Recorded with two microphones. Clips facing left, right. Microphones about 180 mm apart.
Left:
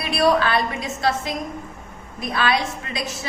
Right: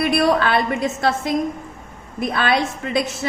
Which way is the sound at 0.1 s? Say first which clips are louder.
Left 3 dB; 55° right (ahead or behind).